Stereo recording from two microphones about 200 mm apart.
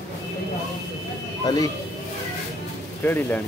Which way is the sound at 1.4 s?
20° left (ahead or behind).